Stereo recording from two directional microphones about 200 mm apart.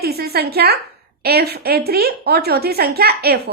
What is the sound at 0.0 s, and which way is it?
A woman's voice, 50° right (ahead or behind).